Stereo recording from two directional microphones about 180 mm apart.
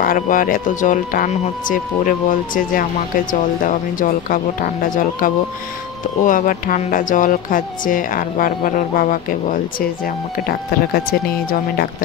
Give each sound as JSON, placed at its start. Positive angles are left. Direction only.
{"t": 0.0, "sound": "speech", "side_deg": 50}